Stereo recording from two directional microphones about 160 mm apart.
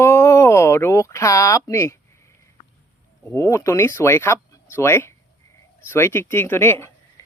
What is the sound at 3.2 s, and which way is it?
Speech, 15° left (ahead or behind).